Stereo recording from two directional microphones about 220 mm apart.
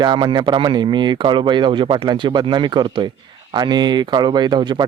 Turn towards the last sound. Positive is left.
turn(degrees=-20)  # may be behind; listen again after turning